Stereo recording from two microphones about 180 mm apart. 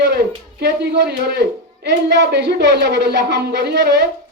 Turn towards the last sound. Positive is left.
turn(degrees=-70)  # may be behind; listen again after turning